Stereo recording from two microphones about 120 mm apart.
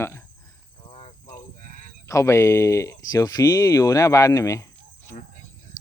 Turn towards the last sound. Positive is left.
turn(degrees=25)  # may be behind; listen again after turning